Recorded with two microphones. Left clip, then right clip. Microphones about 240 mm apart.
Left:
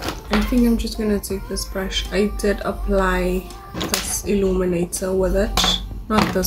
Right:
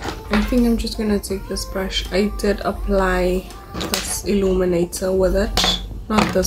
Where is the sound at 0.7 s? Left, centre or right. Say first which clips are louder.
Right 1 dB; centre.